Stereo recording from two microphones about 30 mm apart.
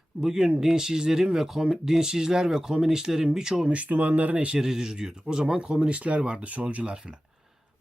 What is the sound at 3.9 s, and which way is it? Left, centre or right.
Speech, right.